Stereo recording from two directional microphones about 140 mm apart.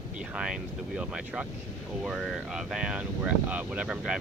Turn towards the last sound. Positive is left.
turn(degrees=-5)  # may be behind; listen again after turning